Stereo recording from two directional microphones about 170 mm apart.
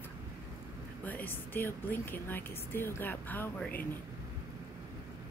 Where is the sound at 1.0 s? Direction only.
10° left (ahead or behind).